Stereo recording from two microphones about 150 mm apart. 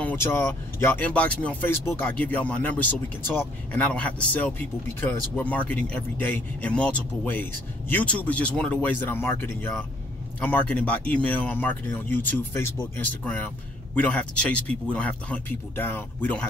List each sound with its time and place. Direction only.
0.0 s speech: 15° left (ahead or behind)